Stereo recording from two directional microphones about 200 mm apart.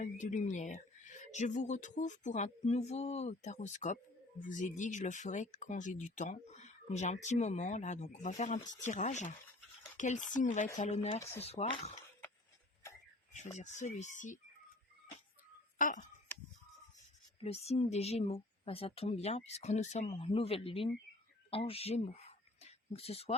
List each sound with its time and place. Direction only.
0.0 s speech: 40° left (ahead or behind)
13.3 s speech: 35° left (ahead or behind)
15.8 s speech: 40° left (ahead or behind)
17.4 s speech: 30° left (ahead or behind)